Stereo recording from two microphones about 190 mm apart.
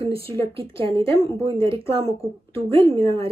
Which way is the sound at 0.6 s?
30° right (ahead or behind).